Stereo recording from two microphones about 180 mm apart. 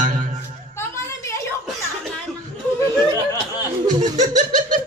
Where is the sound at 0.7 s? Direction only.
15° left (ahead or behind).